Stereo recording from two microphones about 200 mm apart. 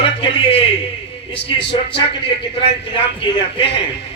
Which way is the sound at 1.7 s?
60° left (ahead or behind).